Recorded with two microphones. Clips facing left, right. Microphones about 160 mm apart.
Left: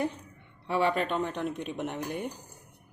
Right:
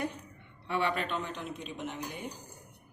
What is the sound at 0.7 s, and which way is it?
Speech, 40° left (ahead or behind).